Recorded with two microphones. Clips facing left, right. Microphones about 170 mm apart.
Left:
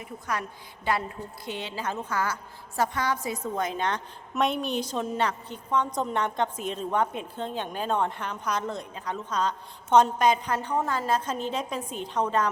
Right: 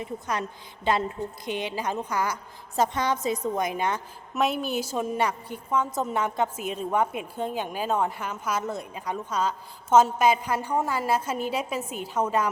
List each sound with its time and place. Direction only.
0.0 s a woman's voice: 20° right (ahead or behind)